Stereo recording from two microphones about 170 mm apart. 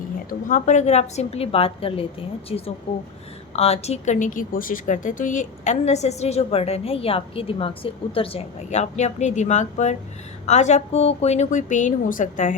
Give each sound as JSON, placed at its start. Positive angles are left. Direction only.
{"t": 0.3, "sound": "a woman's voice", "side_deg": 50}